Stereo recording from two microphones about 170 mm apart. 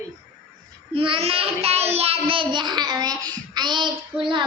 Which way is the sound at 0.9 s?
30° right (ahead or behind).